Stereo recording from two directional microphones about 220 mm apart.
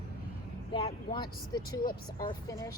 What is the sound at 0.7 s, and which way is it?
A woman's voice, 25° left (ahead or behind).